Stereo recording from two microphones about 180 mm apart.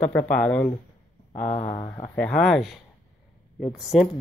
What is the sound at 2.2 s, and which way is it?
Speech, 5° left (ahead or behind).